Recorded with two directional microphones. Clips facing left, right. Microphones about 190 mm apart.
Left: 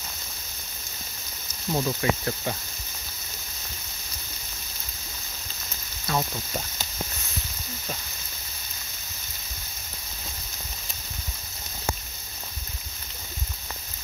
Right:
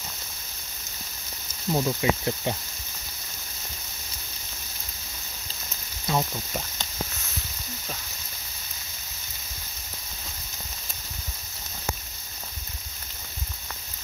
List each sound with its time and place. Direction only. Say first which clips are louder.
1.7 s speech: right 1 dB; 10° right (ahead or behind)
6.1 s speech: right 1 dB; 20° right (ahead or behind)